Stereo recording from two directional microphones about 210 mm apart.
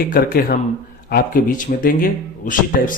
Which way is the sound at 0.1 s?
45° left (ahead or behind).